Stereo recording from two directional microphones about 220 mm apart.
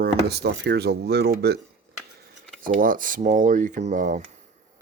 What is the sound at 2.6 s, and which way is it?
Speech, 40° right (ahead or behind).